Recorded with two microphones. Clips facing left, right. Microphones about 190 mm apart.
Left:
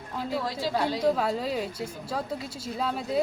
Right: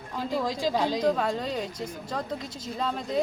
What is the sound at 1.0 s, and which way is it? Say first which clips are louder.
Speech: even; 5° left (ahead or behind).